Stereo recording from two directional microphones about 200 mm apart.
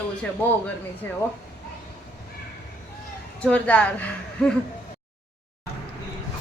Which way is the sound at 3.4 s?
5° left (ahead or behind).